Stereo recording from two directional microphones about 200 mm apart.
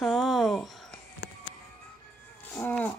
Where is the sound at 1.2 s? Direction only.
60° left (ahead or behind).